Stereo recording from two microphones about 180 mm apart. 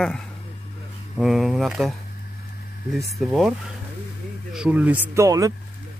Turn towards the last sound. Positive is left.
turn(degrees=-20)  # may be behind; listen again after turning